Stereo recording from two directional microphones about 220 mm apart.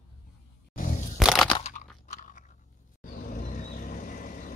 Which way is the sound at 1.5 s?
30° left (ahead or behind).